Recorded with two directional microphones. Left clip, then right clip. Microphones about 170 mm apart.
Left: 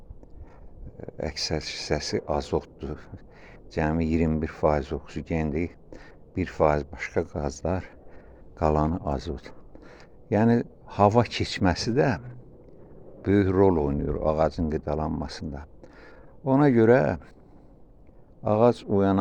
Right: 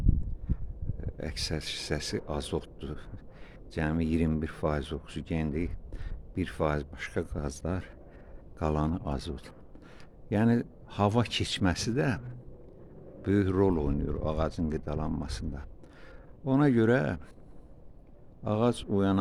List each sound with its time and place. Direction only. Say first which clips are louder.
0.5 s a sound: right 9 dB; 20° right (ahead or behind)
0.9 s a man's voice: left 6 dB; 20° right (ahead or behind)
18.4 s speech: left 8 dB; 20° right (ahead or behind)